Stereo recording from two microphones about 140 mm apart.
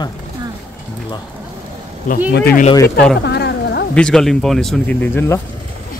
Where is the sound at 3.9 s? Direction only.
5° left (ahead or behind).